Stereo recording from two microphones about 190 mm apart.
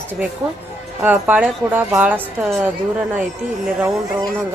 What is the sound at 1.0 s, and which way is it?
A woman's voice, 10° right (ahead or behind).